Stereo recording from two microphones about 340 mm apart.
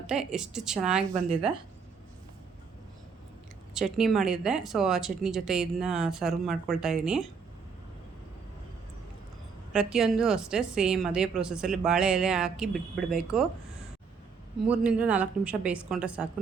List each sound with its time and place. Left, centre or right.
0.1 s a woman's voice: centre
1.1 s speech: centre
3.8 s a woman's voice: centre
9.7 s a woman's voice: centre
14.7 s a woman's voice: centre